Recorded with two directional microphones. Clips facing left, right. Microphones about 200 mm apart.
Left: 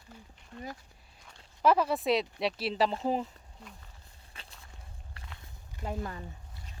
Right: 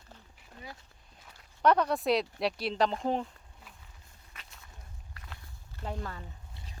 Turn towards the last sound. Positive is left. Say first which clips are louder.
# left 2 dB
turn(degrees=15)  # may be behind; listen again after turning